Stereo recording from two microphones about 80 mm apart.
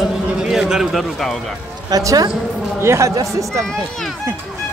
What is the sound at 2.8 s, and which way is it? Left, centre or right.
Speech, right.